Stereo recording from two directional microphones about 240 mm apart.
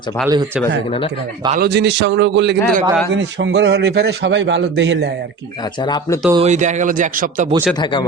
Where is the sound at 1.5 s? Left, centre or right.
Right.